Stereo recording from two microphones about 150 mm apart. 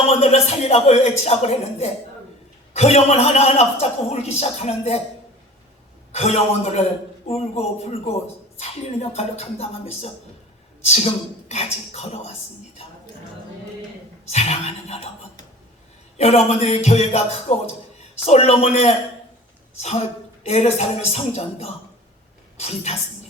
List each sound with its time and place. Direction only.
0.1 s a man's voice: 45° left (ahead or behind)
6.1 s a man's voice: 45° left (ahead or behind)
14.3 s a man's voice: 45° left (ahead or behind)
16.1 s a man's voice: 45° left (ahead or behind)